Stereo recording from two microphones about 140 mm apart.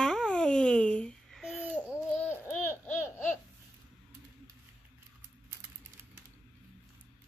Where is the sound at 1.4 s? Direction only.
10° right (ahead or behind).